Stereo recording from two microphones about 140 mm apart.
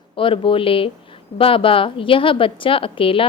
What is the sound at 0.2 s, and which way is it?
A woman's voice, 40° left (ahead or behind).